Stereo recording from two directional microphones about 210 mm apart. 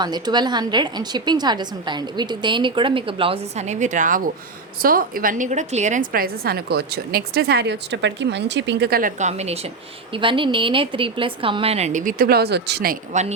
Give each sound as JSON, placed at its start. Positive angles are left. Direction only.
{"t": 0.0, "sound": "a woman's voice", "side_deg": -20}